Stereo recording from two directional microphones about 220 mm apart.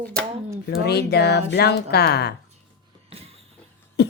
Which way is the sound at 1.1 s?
50° left (ahead or behind).